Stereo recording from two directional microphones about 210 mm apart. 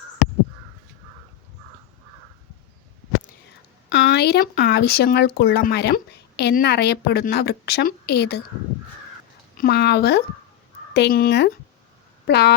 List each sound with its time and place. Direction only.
3.8 s speech: 55° left (ahead or behind)
9.6 s speech: 50° left (ahead or behind)